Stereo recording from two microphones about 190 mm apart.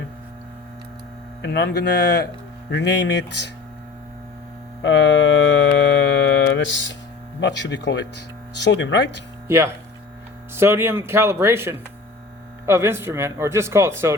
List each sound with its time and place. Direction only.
1.4 s speech: 60° left (ahead or behind)
4.8 s a sound: 75° left (ahead or behind)
7.3 s speech: 70° left (ahead or behind)
9.5 s speech: 15° right (ahead or behind)